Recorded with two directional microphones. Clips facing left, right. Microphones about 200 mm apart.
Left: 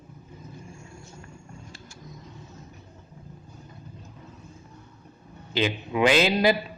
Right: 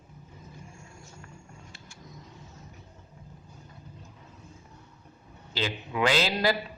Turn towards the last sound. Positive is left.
turn(degrees=20)  # may be behind; listen again after turning